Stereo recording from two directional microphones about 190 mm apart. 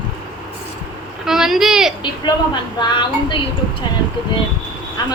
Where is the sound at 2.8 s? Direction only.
25° left (ahead or behind).